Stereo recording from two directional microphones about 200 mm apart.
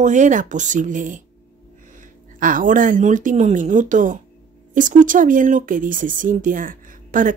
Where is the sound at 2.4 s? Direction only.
40° right (ahead or behind).